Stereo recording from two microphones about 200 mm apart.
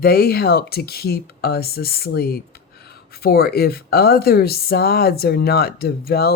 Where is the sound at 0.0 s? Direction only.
50° left (ahead or behind).